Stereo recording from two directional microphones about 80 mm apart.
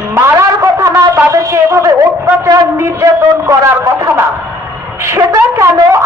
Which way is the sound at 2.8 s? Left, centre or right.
Right.